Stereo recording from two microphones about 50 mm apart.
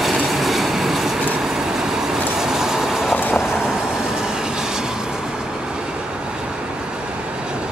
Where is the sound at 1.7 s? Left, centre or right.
Centre.